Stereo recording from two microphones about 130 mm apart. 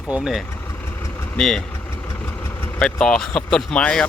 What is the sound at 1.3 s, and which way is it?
Speech, 5° left (ahead or behind).